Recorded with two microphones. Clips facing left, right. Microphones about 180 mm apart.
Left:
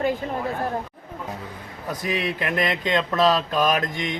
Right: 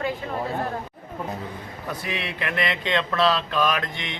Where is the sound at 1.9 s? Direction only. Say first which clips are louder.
Left 5 dB; 40° left (ahead or behind).